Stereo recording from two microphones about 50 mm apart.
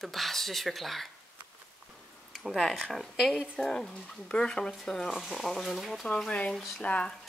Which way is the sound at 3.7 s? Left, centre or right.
Centre.